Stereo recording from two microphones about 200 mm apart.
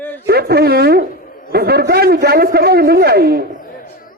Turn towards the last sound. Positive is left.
turn(degrees=45)  # may be behind; listen again after turning